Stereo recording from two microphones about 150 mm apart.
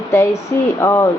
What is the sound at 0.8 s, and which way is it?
Speech, 20° left (ahead or behind).